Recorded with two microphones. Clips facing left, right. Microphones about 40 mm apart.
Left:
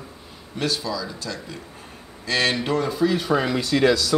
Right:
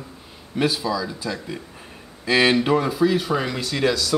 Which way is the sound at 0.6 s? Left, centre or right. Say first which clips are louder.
Right 4 dB; centre.